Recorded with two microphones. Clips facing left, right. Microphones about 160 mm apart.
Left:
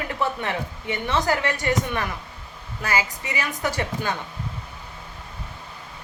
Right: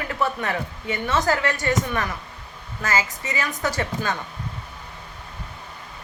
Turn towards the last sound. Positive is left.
turn(degrees=15)  # may be behind; listen again after turning